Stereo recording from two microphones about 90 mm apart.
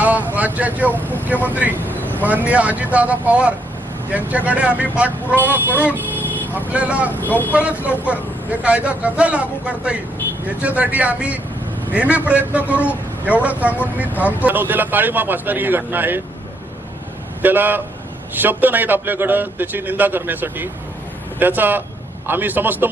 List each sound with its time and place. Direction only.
0.0 s vehicle: 15° right (ahead or behind)
0.3 s a man's voice: 20° right (ahead or behind)
1.8 s vehicle: 20° left (ahead or behind)
2.2 s a man's voice: 20° right (ahead or behind)
6.0 s vehicle: 20° left (ahead or behind)
6.5 s speech: 15° right (ahead or behind)
7.1 s speech: 20° left (ahead or behind)
7.5 s a man's voice: 15° right (ahead or behind)
17.4 s a man's voice: 20° right (ahead or behind)